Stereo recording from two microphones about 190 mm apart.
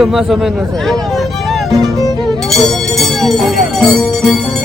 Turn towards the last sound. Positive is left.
turn(degrees=5)  # may be behind; listen again after turning